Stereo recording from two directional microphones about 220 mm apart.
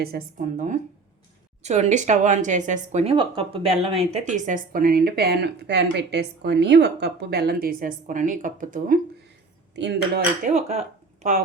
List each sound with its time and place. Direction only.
0.0 s a woman's voice: 40° right (ahead or behind)
10.4 s a woman's voice: 30° right (ahead or behind)